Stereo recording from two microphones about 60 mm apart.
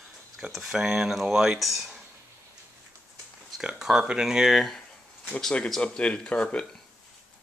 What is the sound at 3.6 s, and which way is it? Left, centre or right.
Speech, centre.